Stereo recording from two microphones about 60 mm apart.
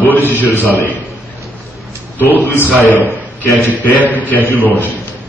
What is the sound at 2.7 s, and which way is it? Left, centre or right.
A man's voice, left.